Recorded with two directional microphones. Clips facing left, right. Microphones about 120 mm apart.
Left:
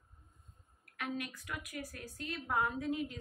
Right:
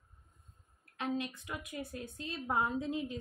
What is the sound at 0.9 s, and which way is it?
A woman's voice, 25° right (ahead or behind).